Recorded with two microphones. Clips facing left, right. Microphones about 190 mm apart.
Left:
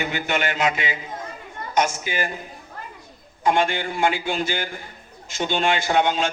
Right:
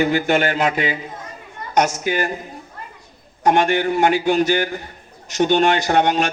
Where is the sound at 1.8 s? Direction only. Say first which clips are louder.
Right 4 dB; 65° right (ahead or behind).